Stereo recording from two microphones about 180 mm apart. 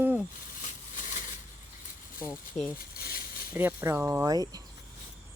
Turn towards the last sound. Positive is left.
turn(degrees=-20)  # may be behind; listen again after turning